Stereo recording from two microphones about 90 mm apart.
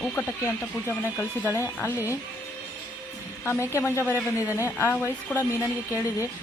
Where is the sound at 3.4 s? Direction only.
30° left (ahead or behind).